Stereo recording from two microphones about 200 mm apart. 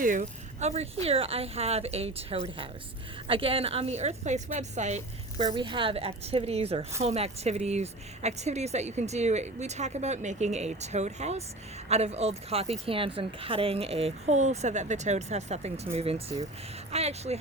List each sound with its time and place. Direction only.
0.0 s a woman's voice: 40° right (ahead or behind)